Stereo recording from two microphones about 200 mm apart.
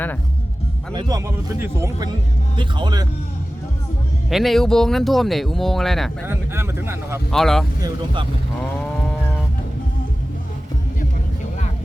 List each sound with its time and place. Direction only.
0.9 s speech: 20° right (ahead or behind)
4.3 s speech: centre (ahead or behind)
6.2 s speech: 10° right (ahead or behind)
7.3 s speech: centre (ahead or behind)
7.8 s speech: 25° right (ahead or behind)